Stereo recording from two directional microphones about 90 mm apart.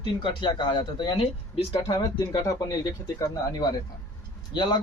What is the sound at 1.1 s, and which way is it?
Speech, 85° left.